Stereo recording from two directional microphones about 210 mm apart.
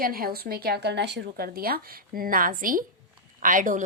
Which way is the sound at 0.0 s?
45° right (ahead or behind).